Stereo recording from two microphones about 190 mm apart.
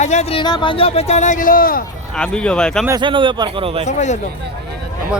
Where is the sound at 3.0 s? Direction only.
25° right (ahead or behind).